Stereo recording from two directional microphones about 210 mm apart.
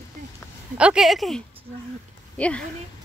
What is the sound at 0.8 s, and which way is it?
Speech, 5° right (ahead or behind).